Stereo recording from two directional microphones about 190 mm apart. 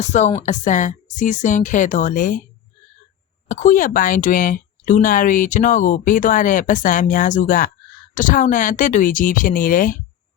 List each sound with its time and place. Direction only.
0.0 s speech: 40° left (ahead or behind)
3.5 s speech: 45° left (ahead or behind)